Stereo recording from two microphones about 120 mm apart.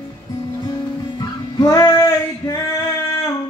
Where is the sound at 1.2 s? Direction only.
30° left (ahead or behind).